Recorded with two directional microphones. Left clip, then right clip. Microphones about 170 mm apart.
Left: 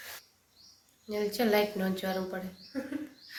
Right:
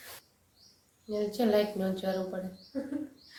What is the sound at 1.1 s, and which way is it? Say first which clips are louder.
A woman's voice: even; 5° left (ahead or behind).